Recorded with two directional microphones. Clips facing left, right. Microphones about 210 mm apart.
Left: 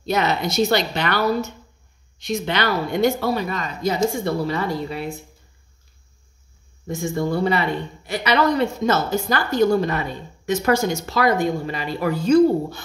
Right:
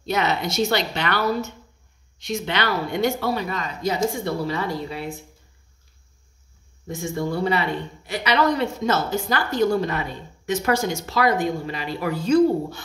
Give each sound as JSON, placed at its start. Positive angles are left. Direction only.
{"t": 0.0, "sound": "a woman's voice", "side_deg": 40}
{"t": 6.9, "sound": "a woman's voice", "side_deg": 45}